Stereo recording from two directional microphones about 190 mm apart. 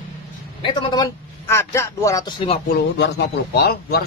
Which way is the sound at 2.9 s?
65° left (ahead or behind).